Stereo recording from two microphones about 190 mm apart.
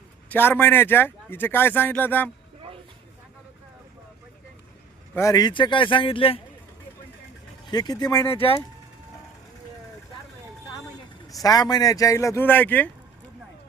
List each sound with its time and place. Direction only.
0.3 s speech: 10° left (ahead or behind)
5.1 s a man's voice: 15° left (ahead or behind)
7.7 s a man's voice: 20° left (ahead or behind)
8.3 s a man's voice: 30° left (ahead or behind)
11.3 s speech: 20° left (ahead or behind)